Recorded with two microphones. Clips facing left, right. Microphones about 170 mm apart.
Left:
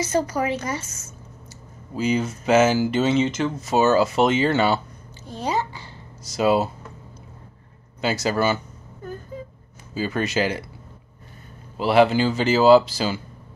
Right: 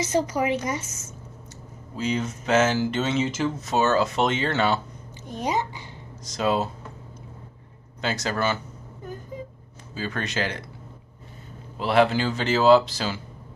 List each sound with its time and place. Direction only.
0.0 s a woman's voice: 20° right (ahead or behind)
2.0 s speech: 5° left (ahead or behind)
5.2 s a woman's voice: 20° right (ahead or behind)
6.3 s speech: 5° left (ahead or behind)
8.0 s speech: 5° left (ahead or behind)
9.0 s a sound: 15° right (ahead or behind)
9.9 s speech: 5° left (ahead or behind)
11.7 s speech: 5° left (ahead or behind)